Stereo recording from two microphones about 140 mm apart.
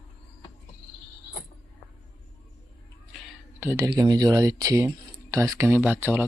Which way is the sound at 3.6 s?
20° right (ahead or behind).